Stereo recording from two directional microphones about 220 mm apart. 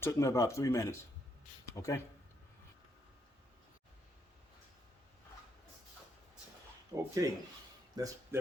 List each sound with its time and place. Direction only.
0.0 s speech: 15° left (ahead or behind)
6.9 s speech: 15° right (ahead or behind)